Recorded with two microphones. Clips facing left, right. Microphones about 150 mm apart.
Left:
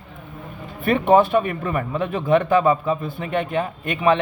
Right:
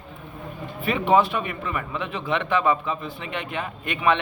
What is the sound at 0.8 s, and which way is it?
A man's voice, 50° left (ahead or behind).